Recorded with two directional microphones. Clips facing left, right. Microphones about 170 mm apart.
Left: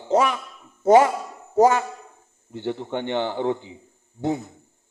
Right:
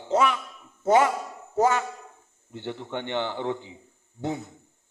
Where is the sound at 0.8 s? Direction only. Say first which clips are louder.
Left 5 dB; 40° left (ahead or behind).